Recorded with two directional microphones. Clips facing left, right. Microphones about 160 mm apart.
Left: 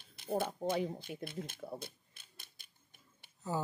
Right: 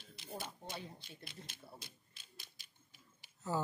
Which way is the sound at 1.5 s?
55° left (ahead or behind).